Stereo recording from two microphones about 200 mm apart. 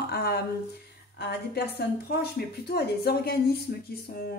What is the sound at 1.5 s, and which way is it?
Speech, 55° left (ahead or behind).